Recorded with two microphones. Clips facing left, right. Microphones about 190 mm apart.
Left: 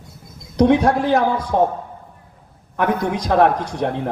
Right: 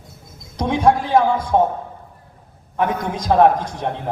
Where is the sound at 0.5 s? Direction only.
65° left (ahead or behind).